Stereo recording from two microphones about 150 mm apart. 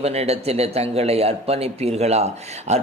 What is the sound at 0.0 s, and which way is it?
A man's voice, 45° right (ahead or behind).